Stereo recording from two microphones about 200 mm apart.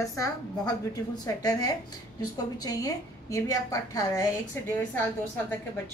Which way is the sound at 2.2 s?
20° left (ahead or behind).